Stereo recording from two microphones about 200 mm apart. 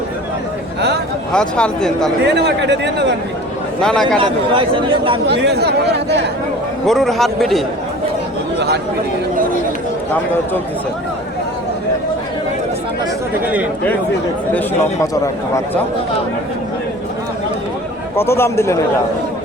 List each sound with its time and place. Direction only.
1.3 s speech: 5° left (ahead or behind)
2.2 s speech: 55° right (ahead or behind)
3.8 s speech: 5° left (ahead or behind)
4.2 s speech: 25° right (ahead or behind)
5.2 s speech: 55° right (ahead or behind)
6.8 s speech: centre (ahead or behind)
8.5 s chatter: 55° right (ahead or behind)
13.4 s a man's voice: 5° right (ahead or behind)
14.5 s a man's voice: 15° left (ahead or behind)
18.2 s a man's voice: 10° left (ahead or behind)